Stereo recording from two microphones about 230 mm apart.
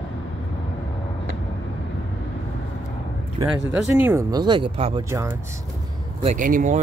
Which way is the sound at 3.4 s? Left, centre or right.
Centre.